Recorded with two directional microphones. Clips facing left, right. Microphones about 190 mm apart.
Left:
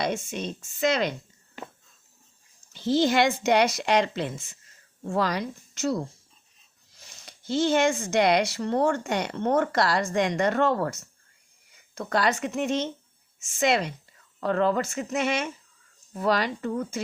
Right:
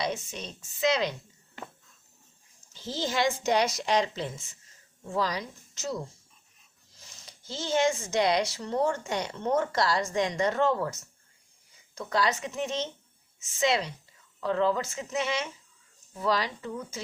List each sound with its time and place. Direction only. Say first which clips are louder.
0.0 s a woman's voice: left 4 dB; 50° left (ahead or behind)
2.7 s speech: left 8 dB; 65° left (ahead or behind)
7.3 s speech: left 9 dB; 60° left (ahead or behind)
11.9 s speech: left 3 dB; 55° left (ahead or behind)